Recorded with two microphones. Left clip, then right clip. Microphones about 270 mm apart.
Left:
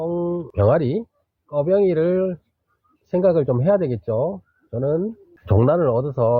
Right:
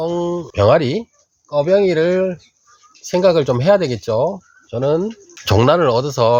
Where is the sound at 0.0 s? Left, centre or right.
Centre.